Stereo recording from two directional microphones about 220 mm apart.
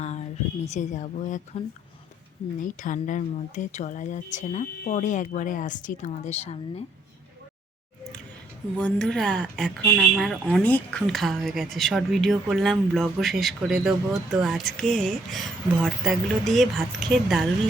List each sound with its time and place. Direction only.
0.0 s a sound: 30° left (ahead or behind)
2.6 s speech: 35° left (ahead or behind)
8.8 s speech: 5° left (ahead or behind)